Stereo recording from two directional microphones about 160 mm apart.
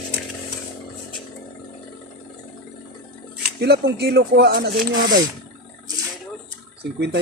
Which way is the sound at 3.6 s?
90° right.